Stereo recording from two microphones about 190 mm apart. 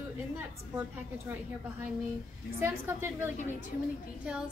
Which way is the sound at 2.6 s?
10° right (ahead or behind).